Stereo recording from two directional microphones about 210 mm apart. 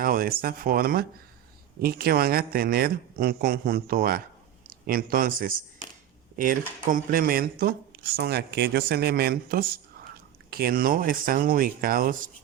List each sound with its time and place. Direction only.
0.0 s speech: 45° right (ahead or behind)